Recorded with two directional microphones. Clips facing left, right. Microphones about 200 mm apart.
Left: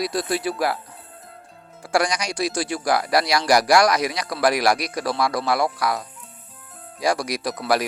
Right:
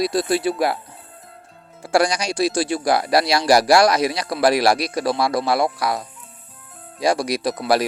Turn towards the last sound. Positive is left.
turn(degrees=-25)  # may be behind; listen again after turning